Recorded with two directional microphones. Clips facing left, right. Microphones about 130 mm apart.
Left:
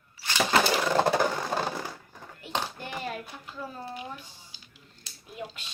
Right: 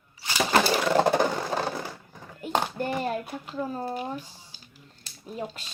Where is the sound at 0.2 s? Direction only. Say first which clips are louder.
Right 1 dB; 10° right (ahead or behind).